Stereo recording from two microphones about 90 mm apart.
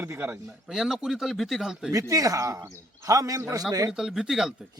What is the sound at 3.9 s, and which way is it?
Speech, 5° right (ahead or behind).